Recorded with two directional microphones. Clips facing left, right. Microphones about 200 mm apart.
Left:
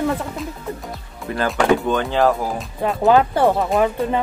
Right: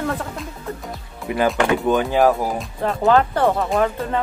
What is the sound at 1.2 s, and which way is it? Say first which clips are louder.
Speech: left 1 dB; 15° right (ahead or behind).